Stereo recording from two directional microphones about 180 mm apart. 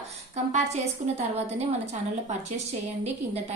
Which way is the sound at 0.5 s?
40° right (ahead or behind).